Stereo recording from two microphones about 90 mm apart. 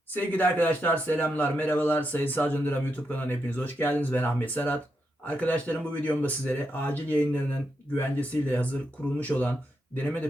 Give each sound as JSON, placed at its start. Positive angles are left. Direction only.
{"t": 0.1, "sound": "speech", "side_deg": 20}